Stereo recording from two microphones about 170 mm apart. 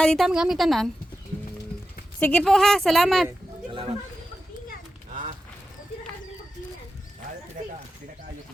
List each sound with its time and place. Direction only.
0.0 s speech: centre (ahead or behind)
2.1 s speech: 5° left (ahead or behind)
3.7 s a sound: 30° right (ahead or behind)